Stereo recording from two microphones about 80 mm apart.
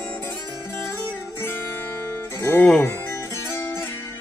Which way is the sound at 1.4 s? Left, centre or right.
Left.